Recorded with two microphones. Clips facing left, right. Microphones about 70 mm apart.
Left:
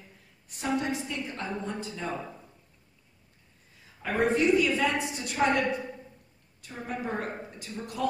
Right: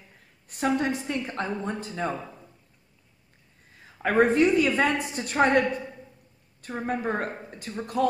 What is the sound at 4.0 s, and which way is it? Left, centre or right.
A woman's voice, right.